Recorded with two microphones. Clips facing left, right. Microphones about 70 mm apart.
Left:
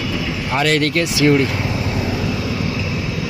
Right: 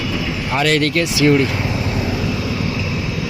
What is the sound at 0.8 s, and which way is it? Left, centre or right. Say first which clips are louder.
Speech: even; left.